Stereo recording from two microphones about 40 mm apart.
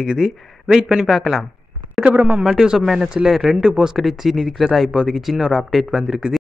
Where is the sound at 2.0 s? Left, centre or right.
Right.